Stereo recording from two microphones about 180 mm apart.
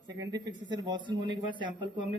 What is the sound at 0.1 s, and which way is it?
Speech, 20° right (ahead or behind).